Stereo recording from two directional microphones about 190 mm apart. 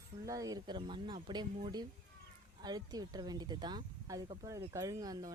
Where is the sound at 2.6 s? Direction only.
20° right (ahead or behind).